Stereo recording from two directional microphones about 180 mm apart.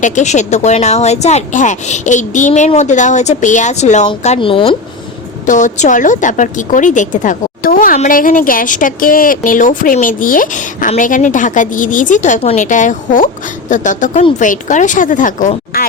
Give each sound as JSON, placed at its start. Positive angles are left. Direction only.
{"t": 0.0, "sound": "speech", "side_deg": 40}
{"t": 5.5, "sound": "a woman's voice", "side_deg": 45}